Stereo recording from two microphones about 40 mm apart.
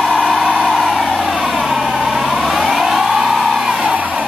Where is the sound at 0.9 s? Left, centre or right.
Centre.